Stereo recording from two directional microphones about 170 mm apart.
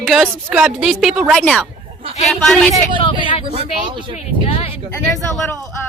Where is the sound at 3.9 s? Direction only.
30° right (ahead or behind).